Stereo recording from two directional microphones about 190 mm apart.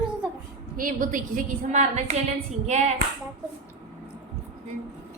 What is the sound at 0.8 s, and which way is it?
A woman's voice, 45° right (ahead or behind).